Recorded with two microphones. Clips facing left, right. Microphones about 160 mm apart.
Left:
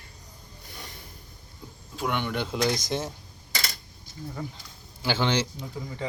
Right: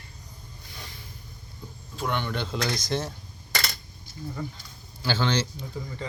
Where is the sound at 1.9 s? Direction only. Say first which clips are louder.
Left 1 dB; 10° left (ahead or behind).